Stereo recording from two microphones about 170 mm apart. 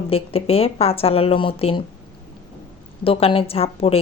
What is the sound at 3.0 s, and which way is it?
Speech, 35° left (ahead or behind).